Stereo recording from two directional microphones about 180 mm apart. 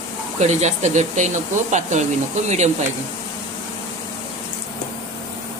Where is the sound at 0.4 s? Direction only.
40° right (ahead or behind).